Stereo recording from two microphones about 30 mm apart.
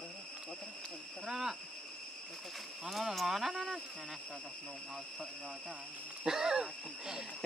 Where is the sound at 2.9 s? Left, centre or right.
Centre.